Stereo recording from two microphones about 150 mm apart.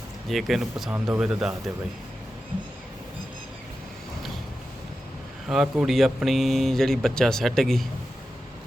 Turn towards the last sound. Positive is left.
turn(degrees=0)  # may be behind; listen again after turning